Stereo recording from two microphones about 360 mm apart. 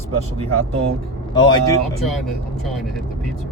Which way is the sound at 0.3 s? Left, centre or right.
Centre.